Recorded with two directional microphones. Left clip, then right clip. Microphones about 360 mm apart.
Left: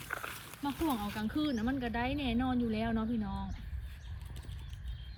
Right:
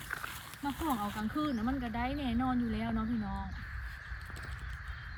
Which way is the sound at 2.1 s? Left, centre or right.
Right.